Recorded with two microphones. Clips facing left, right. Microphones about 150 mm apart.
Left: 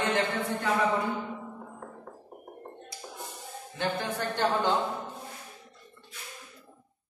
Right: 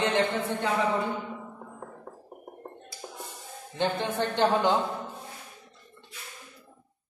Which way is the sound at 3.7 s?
25° right (ahead or behind).